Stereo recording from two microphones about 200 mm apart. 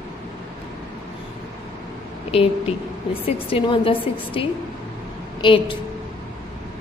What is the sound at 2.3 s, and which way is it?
A woman's voice, 30° left (ahead or behind).